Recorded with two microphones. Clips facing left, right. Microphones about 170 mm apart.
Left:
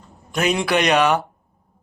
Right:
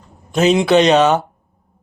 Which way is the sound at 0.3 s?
25° right (ahead or behind).